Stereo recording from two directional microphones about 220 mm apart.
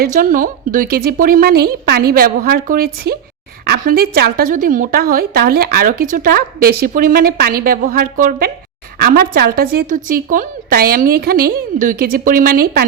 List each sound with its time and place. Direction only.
0.0 s a woman's voice: 40° right (ahead or behind)